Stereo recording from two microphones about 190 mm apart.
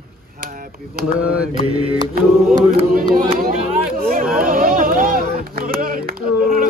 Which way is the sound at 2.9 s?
50° right (ahead or behind).